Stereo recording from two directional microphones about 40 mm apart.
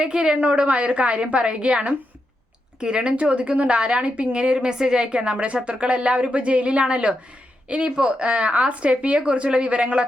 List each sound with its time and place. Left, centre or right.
0.0 s a woman's voice: right